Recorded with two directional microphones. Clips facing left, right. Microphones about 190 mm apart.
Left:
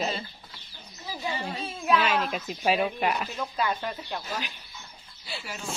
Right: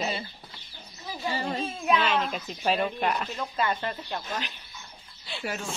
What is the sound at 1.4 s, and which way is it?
A woman's voice, centre (ahead or behind).